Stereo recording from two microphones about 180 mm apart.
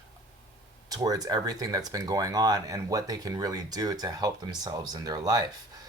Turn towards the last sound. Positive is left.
turn(degrees=-20)  # may be behind; listen again after turning